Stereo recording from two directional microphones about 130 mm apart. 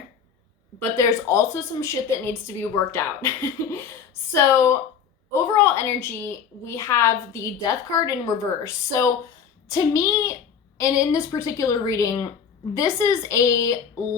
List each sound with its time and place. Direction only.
0.9 s a woman's voice: 20° left (ahead or behind)